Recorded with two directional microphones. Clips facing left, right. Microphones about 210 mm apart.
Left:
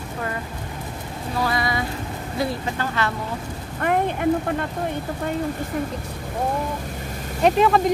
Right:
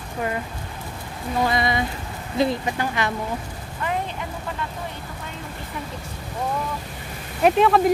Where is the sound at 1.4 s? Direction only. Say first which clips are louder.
Right 2 dB; 20° right (ahead or behind).